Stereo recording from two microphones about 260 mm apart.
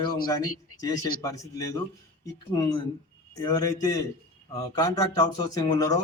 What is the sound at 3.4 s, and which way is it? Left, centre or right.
A man's voice, centre.